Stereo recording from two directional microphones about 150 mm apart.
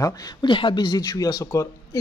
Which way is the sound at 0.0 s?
25° left (ahead or behind).